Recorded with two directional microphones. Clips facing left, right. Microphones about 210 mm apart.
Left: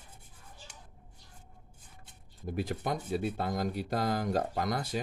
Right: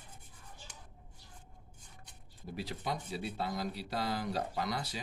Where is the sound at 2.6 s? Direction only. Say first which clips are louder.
Left 5 dB; 50° left (ahead or behind).